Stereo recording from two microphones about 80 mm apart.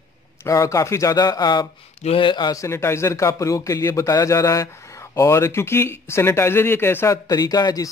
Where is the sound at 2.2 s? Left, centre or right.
Left.